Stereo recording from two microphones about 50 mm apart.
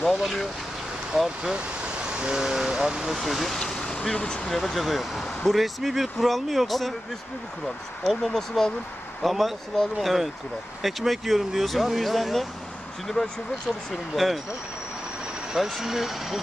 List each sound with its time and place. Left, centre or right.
0.0 s speech: centre
1.4 s speech: centre
3.2 s speech: centre
3.6 s vehicle: centre
4.1 s speech: centre
4.4 s speech: centre
8.0 s speech: centre
15.5 s speech: centre